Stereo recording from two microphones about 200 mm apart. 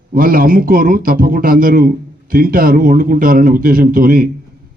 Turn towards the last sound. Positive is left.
turn(degrees=-45)  # may be behind; listen again after turning